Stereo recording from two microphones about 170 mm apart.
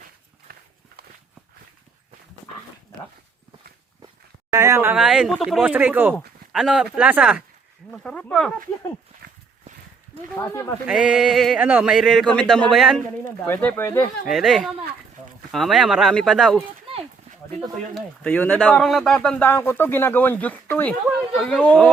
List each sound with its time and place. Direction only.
0.5 s walk: 60° right (ahead or behind)
4.5 s a sound: 15° right (ahead or behind)
4.9 s speech: 5° right (ahead or behind)
9.2 s a sound: 70° right (ahead or behind)
10.3 s speech: 15° left (ahead or behind)
10.8 s speech: 5° right (ahead or behind)
13.5 s speech: 10° left (ahead or behind)
14.3 s speech: centre (ahead or behind)
17.9 s speech: 5° left (ahead or behind)